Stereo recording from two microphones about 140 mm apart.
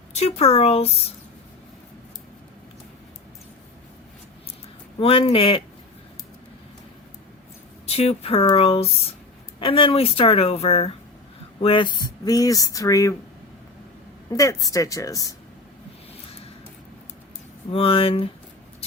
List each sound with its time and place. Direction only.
0.1 s speech: 50° left (ahead or behind)
4.9 s speech: 45° left (ahead or behind)
7.9 s speech: 45° left (ahead or behind)
11.6 s speech: 35° left (ahead or behind)
14.3 s speech: 25° left (ahead or behind)
17.7 s speech: 40° left (ahead or behind)